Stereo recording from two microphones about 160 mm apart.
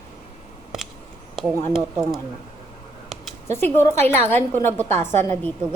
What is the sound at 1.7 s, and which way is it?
Speech, centre (ahead or behind).